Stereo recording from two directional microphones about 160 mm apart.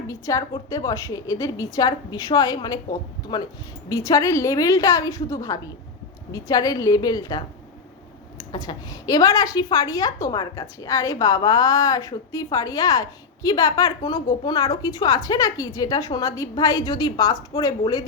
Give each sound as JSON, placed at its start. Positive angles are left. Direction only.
{"t": 0.1, "sound": "a woman's voice", "side_deg": 20}